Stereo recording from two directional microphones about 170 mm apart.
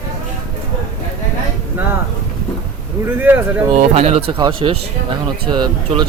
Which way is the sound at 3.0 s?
10° right (ahead or behind).